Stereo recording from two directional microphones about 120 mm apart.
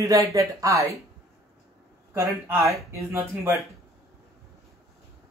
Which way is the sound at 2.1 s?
25° right (ahead or behind).